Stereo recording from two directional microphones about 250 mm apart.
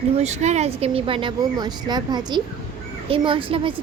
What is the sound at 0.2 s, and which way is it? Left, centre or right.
A woman's voice, right.